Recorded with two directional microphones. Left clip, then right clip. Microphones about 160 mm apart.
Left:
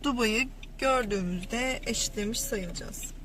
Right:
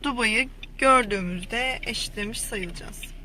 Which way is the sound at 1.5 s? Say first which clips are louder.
Right 4 dB; 35° right (ahead or behind).